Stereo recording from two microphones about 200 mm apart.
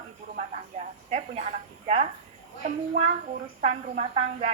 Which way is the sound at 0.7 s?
35° right (ahead or behind).